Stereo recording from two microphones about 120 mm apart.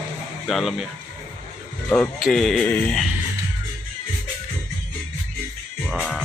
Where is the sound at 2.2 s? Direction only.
Centre (ahead or behind).